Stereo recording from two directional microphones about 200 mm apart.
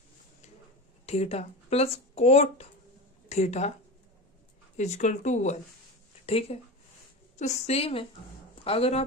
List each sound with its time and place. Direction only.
1.0 s speech: 30° left (ahead or behind)
4.8 s speech: 35° left (ahead or behind)